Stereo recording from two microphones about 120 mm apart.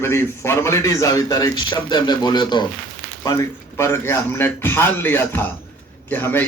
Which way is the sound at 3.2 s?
25° left (ahead or behind).